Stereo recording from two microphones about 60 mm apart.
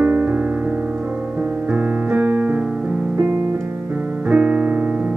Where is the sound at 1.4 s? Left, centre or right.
Right.